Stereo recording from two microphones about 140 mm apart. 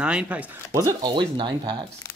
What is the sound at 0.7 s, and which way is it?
Speech, 30° right (ahead or behind).